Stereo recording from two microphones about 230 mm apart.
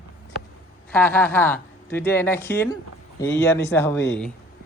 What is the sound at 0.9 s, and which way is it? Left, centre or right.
Speech, centre.